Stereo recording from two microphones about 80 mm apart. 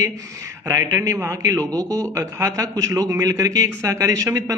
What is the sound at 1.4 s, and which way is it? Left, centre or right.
A man's voice, right.